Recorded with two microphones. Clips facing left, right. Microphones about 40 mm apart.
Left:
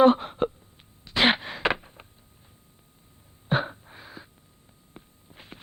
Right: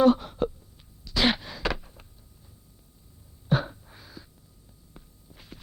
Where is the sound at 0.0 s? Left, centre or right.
Left.